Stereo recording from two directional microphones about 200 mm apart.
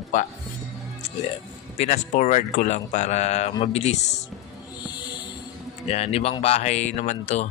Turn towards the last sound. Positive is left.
turn(degrees=35)  # may be behind; listen again after turning